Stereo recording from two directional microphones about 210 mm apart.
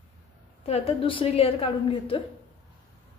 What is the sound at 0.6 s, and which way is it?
A woman's voice, 30° left (ahead or behind).